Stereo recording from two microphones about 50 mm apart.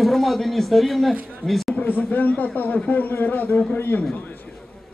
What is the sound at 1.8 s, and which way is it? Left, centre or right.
A man's voice, left.